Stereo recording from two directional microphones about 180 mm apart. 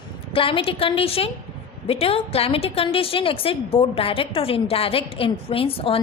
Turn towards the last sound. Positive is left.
turn(degrees=30)  # may be behind; listen again after turning